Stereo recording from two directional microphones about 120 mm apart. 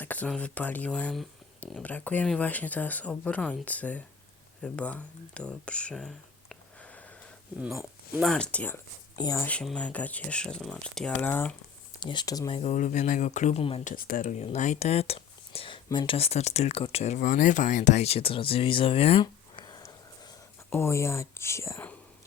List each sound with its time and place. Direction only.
0.0 s speech: 15° left (ahead or behind)
8.2 s speech: 5° left (ahead or behind)
9.1 s speech: 30° left (ahead or behind)
9.4 s speech: 10° left (ahead or behind)
11.9 s speech: 40° left (ahead or behind)
12.5 s speech: 45° left (ahead or behind)
12.7 s speech: 90° left
13.6 s speech: 50° left (ahead or behind)
13.8 s speech: 90° left
14.4 s speech: 75° left (ahead or behind); by 19.2 s 55° left (ahead or behind)
19.2 s a sound: 35° left (ahead or behind)
20.7 s speech: 20° left (ahead or behind)